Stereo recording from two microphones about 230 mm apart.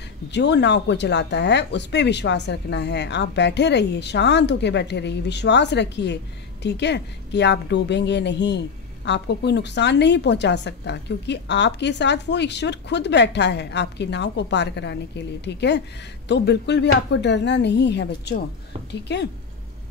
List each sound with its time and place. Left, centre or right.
0.3 s a woman's voice: left